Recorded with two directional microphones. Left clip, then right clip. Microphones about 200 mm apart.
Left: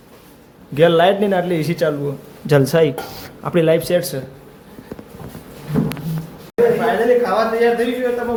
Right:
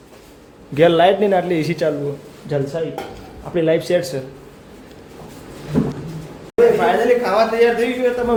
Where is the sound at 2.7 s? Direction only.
50° left (ahead or behind).